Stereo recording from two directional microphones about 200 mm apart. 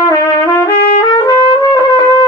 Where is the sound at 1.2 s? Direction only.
15° left (ahead or behind).